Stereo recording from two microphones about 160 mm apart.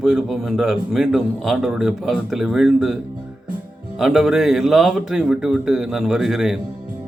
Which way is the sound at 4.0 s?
5° right (ahead or behind).